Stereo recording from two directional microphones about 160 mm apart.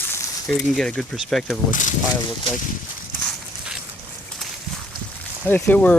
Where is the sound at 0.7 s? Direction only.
5° left (ahead or behind).